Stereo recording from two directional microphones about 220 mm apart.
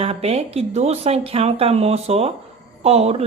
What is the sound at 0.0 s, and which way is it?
Speech, 25° right (ahead or behind).